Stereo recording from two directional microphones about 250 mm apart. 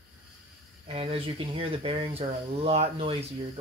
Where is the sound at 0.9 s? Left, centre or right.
Right.